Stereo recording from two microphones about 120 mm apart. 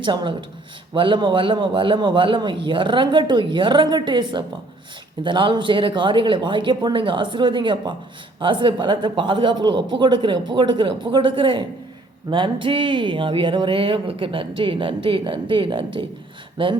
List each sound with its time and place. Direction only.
0.0 s speech: 40° right (ahead or behind)